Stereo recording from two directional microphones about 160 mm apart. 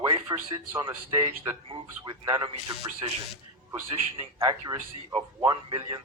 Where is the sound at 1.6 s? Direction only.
25° right (ahead or behind).